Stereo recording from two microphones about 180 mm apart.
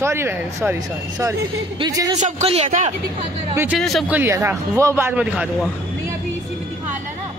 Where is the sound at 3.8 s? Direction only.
Centre (ahead or behind).